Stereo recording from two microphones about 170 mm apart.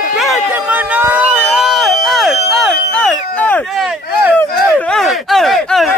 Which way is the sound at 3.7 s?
5° right (ahead or behind).